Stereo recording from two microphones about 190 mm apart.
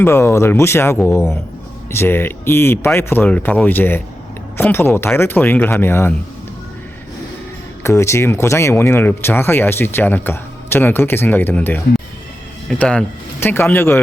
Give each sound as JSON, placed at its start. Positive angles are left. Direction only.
{"t": 0.0, "sound": "speech", "side_deg": 15}
{"t": 7.9, "sound": "speech", "side_deg": 15}
{"t": 12.8, "sound": "speech", "side_deg": 5}